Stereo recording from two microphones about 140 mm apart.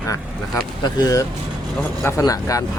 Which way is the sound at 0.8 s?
25° left (ahead or behind).